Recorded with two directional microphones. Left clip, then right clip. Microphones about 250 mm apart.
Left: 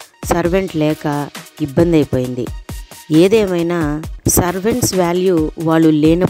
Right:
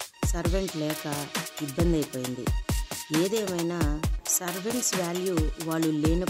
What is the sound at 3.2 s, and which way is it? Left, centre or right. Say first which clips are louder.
Speech: left 17 dB; left.